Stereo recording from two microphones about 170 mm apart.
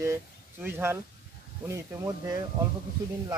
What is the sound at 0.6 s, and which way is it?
Speech, 15° right (ahead or behind).